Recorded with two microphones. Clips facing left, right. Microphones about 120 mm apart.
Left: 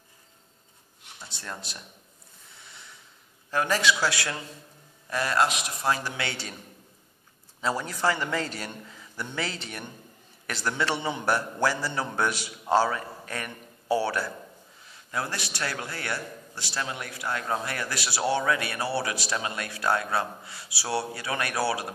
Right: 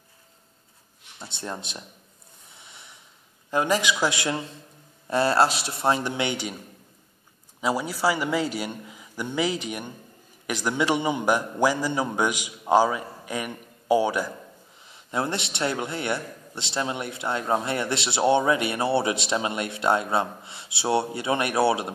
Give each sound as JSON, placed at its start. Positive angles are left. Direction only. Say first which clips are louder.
{"t": 1.2, "sound": "a man's voice", "louder": "right 5 dB", "side_deg": -25}
{"t": 3.4, "sound": "a man's voice", "louder": "right 2 dB", "side_deg": -20}
{"t": 7.6, "sound": "a man's voice", "louder": "right 3 dB", "side_deg": -10}